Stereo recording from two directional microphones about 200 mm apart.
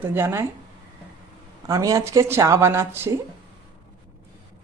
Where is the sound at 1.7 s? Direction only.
15° right (ahead or behind).